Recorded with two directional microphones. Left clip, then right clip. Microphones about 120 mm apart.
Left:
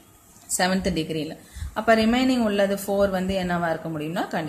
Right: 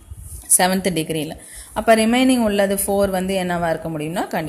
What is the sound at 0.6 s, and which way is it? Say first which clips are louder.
A woman's voice: right 5 dB; 60° right (ahead or behind).